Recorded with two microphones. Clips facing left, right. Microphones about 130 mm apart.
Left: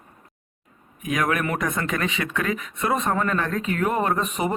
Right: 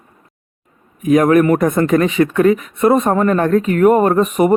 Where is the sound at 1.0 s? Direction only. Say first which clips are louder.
Right 13 dB; 40° right (ahead or behind).